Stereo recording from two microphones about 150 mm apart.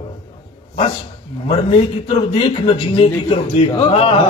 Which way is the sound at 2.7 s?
40° left (ahead or behind).